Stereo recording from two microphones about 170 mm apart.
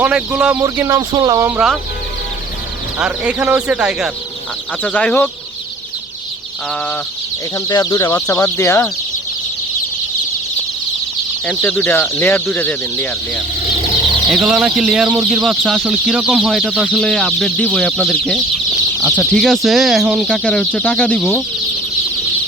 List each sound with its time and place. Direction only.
0.0 s speech: 5° right (ahead or behind)
0.6 s speech: 15° right (ahead or behind)
1.5 s speech: centre (ahead or behind)
3.0 s speech: 5° right (ahead or behind)
4.8 s speech: 5° left (ahead or behind)
7.5 s speech: 20° left (ahead or behind)
11.4 s speech: 10° left (ahead or behind)
14.3 s speech: centre (ahead or behind)